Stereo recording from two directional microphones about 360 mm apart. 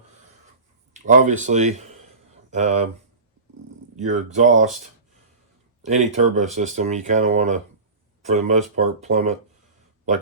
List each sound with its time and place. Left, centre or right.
0.9 s speech: right
3.9 s speech: centre
5.8 s speech: centre